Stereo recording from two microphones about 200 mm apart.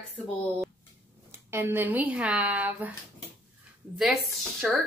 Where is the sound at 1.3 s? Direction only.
10° right (ahead or behind).